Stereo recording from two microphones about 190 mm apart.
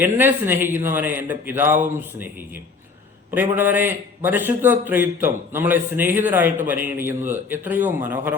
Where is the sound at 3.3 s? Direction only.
10° right (ahead or behind).